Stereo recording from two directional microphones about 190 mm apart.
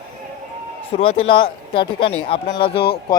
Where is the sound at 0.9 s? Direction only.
30° left (ahead or behind).